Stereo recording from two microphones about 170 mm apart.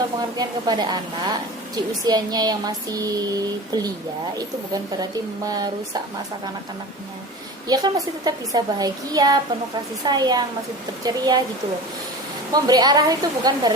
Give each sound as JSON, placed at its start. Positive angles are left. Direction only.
{"t": 0.2, "sound": "a woman's voice", "side_deg": -25}
{"t": 7.7, "sound": "a woman's voice", "side_deg": -25}
{"t": 12.5, "sound": "a woman's voice", "side_deg": -20}